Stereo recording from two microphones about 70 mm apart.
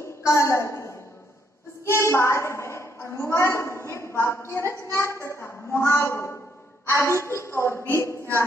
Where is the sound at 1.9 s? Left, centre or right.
Left.